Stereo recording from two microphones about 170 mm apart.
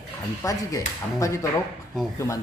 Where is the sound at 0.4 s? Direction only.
20° left (ahead or behind).